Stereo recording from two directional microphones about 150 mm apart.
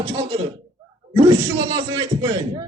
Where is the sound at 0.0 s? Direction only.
40° right (ahead or behind).